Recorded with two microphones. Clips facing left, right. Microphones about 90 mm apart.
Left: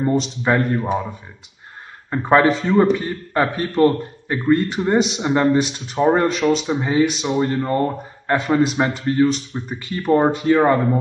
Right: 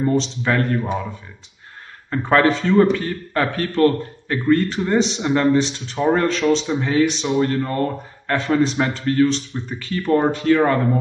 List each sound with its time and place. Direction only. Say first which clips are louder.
0.4 s speech: left 2 dB; 20° left (ahead or behind)
2.0 s speech: left 1 dB; 15° left (ahead or behind)
7.3 s speech: left 1 dB; 20° left (ahead or behind)